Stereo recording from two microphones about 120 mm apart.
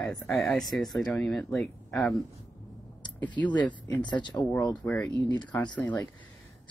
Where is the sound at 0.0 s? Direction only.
5° left (ahead or behind).